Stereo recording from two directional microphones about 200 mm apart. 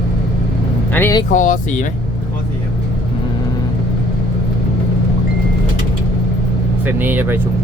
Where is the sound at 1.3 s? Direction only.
40° left (ahead or behind).